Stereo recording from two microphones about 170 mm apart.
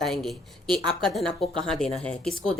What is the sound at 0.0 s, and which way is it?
A woman's voice, centre (ahead or behind).